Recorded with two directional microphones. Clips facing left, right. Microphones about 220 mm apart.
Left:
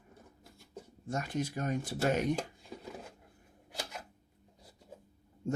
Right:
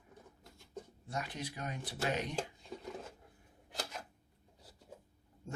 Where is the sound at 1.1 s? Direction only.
45° left (ahead or behind).